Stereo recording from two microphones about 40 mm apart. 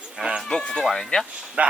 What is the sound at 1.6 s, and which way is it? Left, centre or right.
Speech, right.